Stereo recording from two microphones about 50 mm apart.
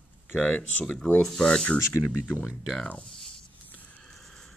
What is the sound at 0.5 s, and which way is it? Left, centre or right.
Speech, left.